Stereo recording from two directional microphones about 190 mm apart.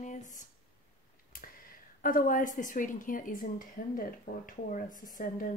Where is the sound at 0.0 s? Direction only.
40° left (ahead or behind).